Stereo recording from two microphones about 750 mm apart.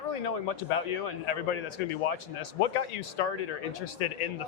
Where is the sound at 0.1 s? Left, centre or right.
Left.